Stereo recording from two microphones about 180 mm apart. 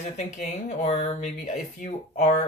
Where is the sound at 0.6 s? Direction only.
35° left (ahead or behind).